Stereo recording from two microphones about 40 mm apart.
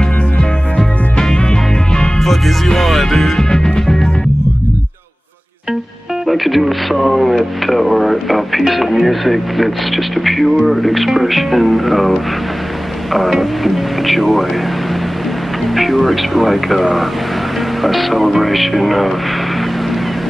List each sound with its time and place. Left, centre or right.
1.3 s music: left
2.1 s music: centre
6.2 s speech: centre
15.6 s speech: centre